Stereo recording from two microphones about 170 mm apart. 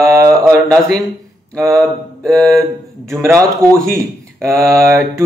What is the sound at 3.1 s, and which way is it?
A man's voice, 15° right (ahead or behind).